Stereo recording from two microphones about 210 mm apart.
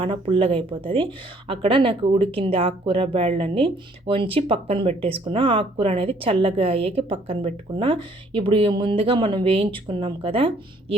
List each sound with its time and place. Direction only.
0.0 s speech: 25° right (ahead or behind)